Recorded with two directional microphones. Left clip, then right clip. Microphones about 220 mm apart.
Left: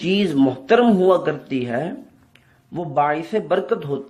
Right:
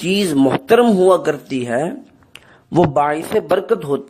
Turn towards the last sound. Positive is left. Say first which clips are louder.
# right 4 dB
turn(degrees=-45)  # may be behind; listen again after turning